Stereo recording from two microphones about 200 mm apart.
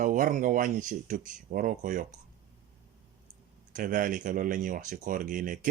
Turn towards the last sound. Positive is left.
turn(degrees=-40)  # may be behind; listen again after turning